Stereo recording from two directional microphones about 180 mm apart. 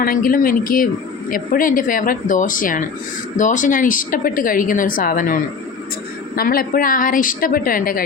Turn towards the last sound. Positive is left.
turn(degrees=50)  # may be behind; listen again after turning